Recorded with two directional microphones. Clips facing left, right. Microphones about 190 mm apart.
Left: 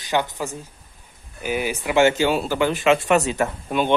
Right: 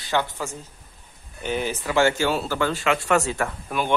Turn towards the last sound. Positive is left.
turn(degrees=20)  # may be behind; listen again after turning